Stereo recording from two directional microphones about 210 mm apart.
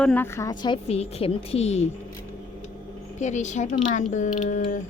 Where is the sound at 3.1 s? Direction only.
35° left (ahead or behind).